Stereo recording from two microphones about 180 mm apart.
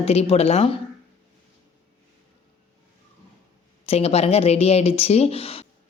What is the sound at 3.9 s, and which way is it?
A woman's voice, 35° left (ahead or behind).